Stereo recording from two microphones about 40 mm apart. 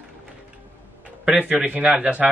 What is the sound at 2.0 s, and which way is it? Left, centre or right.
Speech, right.